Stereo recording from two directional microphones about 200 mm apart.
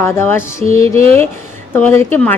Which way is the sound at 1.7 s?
10° left (ahead or behind).